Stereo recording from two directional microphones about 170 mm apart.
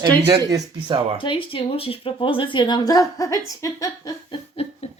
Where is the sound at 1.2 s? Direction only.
30° left (ahead or behind).